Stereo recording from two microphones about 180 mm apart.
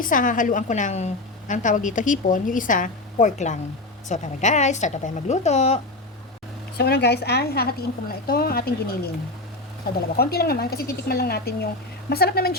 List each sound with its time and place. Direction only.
0.0 s a woman's voice: 50° left (ahead or behind)
6.7 s speech: 65° left (ahead or behind)
10.2 s speech: 60° left (ahead or behind)